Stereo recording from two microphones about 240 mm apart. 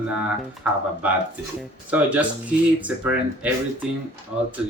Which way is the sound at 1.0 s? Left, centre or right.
Centre.